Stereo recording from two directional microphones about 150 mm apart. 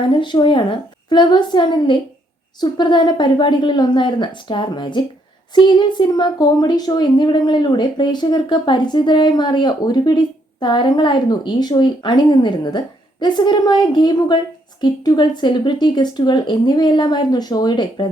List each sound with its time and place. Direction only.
0.0 s a woman's voice: 30° left (ahead or behind)